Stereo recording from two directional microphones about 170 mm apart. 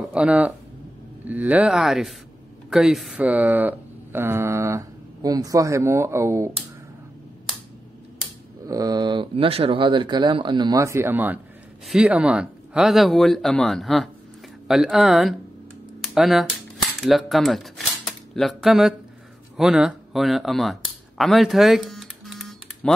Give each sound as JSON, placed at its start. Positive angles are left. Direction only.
{"t": 0.1, "sound": "speech", "side_deg": -5}
{"t": 8.6, "sound": "speech", "side_deg": -20}
{"t": 16.2, "sound": "cutlery", "side_deg": 0}
{"t": 19.5, "sound": "a sound", "side_deg": -5}